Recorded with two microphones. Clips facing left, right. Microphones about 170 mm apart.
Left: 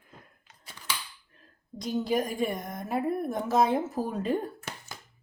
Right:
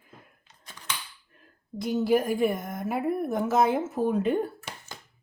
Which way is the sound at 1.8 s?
5° right (ahead or behind).